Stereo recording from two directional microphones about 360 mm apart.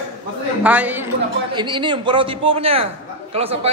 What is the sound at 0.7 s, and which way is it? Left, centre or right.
A woman's voice, centre.